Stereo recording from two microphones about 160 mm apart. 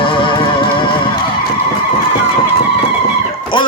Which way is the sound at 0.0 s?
30° left (ahead or behind).